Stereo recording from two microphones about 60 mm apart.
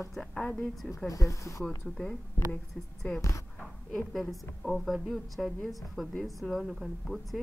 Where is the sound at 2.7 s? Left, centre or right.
Left.